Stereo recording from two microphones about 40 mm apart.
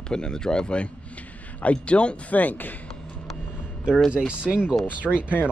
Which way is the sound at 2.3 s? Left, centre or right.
Left.